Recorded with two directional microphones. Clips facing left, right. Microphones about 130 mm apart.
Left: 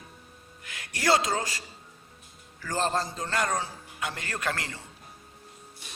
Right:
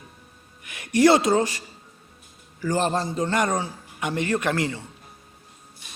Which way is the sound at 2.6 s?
15° right (ahead or behind).